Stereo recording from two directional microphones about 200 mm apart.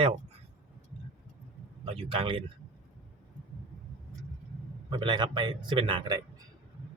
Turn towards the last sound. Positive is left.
turn(degrees=-25)  # may be behind; listen again after turning